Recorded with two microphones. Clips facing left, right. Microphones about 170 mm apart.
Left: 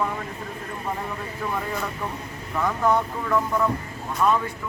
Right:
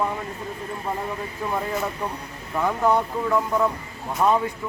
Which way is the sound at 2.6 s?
15° right (ahead or behind).